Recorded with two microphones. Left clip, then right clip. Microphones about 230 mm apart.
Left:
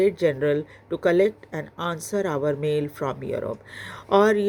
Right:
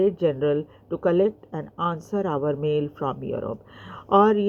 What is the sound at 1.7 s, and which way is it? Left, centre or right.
Speech, left.